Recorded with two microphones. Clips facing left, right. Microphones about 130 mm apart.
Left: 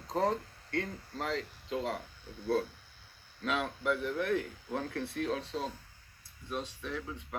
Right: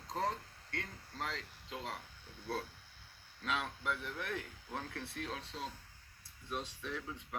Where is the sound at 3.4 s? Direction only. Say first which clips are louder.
Left 6 dB; 60° left (ahead or behind).